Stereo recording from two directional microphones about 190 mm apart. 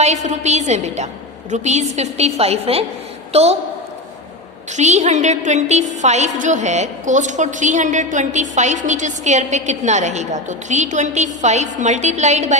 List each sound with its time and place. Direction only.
0.0 s a woman's voice: 35° right (ahead or behind)
4.8 s a woman's voice: 35° right (ahead or behind)